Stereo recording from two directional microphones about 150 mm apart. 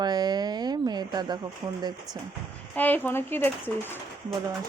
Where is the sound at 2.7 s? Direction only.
10° left (ahead or behind).